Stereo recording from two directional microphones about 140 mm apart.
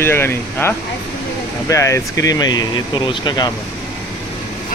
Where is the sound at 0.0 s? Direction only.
15° left (ahead or behind).